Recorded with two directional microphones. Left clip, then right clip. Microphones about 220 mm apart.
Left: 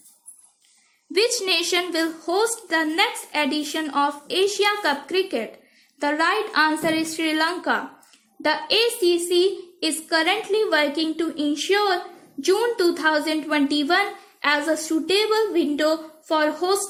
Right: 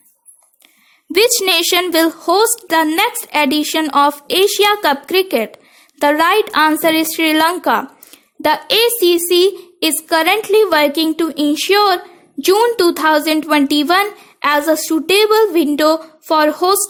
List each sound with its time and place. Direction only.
1.1 s a woman's voice: 45° right (ahead or behind)